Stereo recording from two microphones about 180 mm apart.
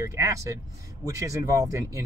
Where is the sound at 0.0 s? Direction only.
15° right (ahead or behind).